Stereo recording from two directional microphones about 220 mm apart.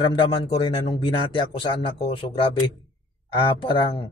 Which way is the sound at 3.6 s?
25° left (ahead or behind).